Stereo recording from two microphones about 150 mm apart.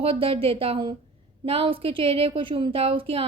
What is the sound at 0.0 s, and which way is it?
A woman's voice, 40° right (ahead or behind).